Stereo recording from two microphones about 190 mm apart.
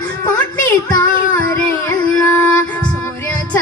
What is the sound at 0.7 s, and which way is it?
Child singing, 15° left (ahead or behind).